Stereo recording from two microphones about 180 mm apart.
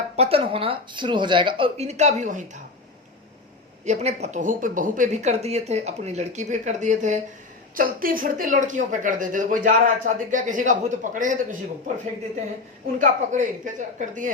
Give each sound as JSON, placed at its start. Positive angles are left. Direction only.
{"t": 0.2, "sound": "speech", "side_deg": -30}
{"t": 3.8, "sound": "a woman's voice", "side_deg": -40}
{"t": 13.0, "sound": "a woman's voice", "side_deg": -45}